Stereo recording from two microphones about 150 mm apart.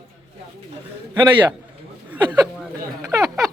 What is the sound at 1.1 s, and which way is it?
Speech, 30° right (ahead or behind).